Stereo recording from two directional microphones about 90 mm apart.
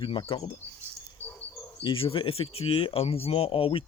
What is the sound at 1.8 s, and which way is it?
Speech, 80° left.